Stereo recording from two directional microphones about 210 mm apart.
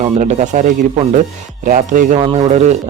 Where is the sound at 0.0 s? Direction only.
35° right (ahead or behind).